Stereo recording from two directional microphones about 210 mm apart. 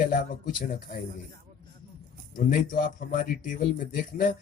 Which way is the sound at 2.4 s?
40° left (ahead or behind).